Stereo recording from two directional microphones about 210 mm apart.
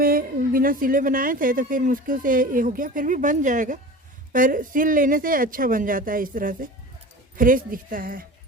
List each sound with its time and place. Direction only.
0.0 s a woman's voice: 45° right (ahead or behind)